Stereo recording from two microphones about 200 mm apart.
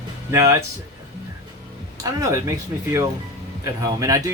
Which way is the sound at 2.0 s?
15° right (ahead or behind).